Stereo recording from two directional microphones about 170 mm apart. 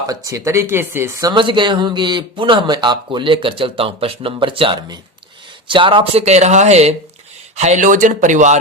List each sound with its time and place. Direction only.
0.1 s speech: 20° right (ahead or behind); by 8.5 s 45° right (ahead or behind)